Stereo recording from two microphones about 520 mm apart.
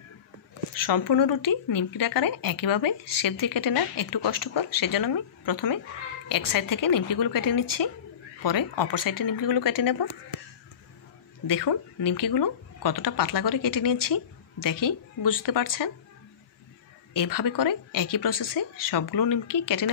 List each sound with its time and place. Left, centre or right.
0.8 s speech: left
11.4 s speech: left
17.1 s speech: left